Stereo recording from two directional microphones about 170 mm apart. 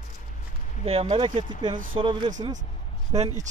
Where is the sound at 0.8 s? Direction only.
35° right (ahead or behind).